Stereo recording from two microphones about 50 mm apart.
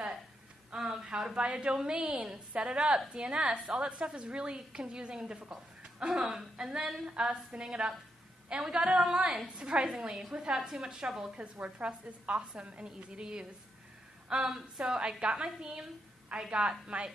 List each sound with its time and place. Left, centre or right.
0.7 s a woman's voice: centre
11.3 s a woman's voice: right